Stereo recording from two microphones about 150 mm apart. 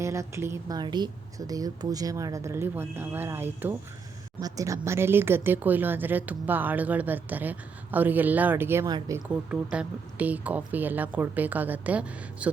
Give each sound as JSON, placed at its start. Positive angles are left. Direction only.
{"t": 0.0, "sound": "a woman's voice", "side_deg": -20}
{"t": 9.5, "sound": "speech", "side_deg": -10}